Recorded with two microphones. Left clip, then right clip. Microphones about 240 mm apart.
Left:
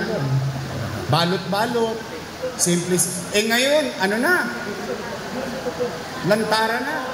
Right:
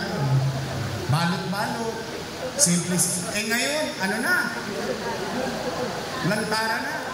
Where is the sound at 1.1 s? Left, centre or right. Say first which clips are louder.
Left 7 dB; left.